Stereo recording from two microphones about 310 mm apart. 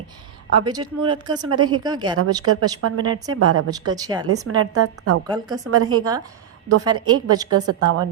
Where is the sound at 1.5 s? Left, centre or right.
Right.